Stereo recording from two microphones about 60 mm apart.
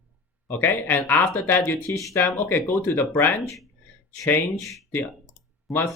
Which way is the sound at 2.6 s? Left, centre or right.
Left.